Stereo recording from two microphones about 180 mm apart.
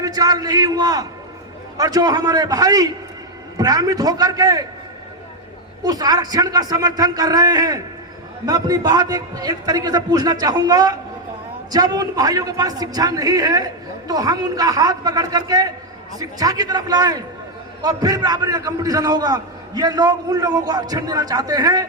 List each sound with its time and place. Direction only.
0.0 s a man's voice: 20° right (ahead or behind)
5.8 s a man's voice: 20° right (ahead or behind)